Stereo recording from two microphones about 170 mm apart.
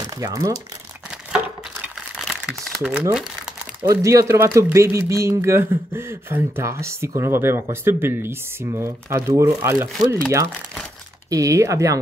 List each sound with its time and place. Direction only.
0.0 s speech: 20° right (ahead or behind)
1.3 s a sound: 5° right (ahead or behind)
2.4 s speech: centre (ahead or behind)
3.8 s speech: 20° right (ahead or behind)